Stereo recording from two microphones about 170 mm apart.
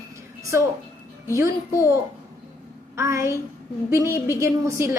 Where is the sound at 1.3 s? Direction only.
15° right (ahead or behind).